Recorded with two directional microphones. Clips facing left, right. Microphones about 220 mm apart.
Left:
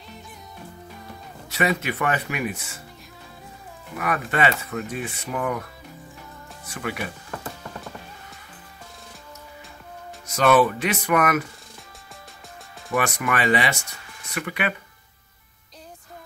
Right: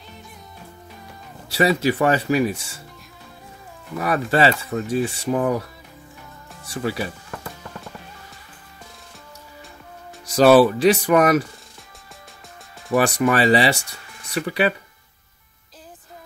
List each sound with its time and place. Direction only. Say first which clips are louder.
1.5 s speech: right 6 dB; 30° right (ahead or behind)
4.0 s speech: right 5 dB; 30° right (ahead or behind)
6.7 s speech: right 5 dB; 30° right (ahead or behind)
10.2 s speech: right 6 dB; 35° right (ahead or behind)
12.9 s speech: right 6 dB; 35° right (ahead or behind)